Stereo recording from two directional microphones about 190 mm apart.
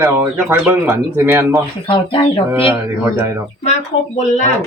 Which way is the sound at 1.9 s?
25° left (ahead or behind).